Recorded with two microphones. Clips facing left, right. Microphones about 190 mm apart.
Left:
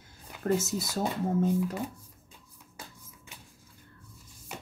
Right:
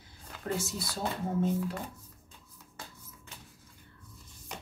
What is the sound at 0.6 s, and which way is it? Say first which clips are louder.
Speech: left 4 dB; 45° left (ahead or behind).